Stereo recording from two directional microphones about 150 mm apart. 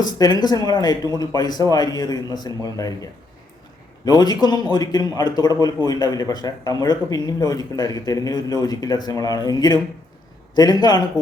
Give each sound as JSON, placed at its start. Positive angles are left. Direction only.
{"t": 0.0, "sound": "a man's voice", "side_deg": 25}
{"t": 4.0, "sound": "a man's voice", "side_deg": 25}